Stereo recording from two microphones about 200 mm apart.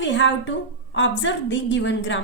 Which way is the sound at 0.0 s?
65° left (ahead or behind).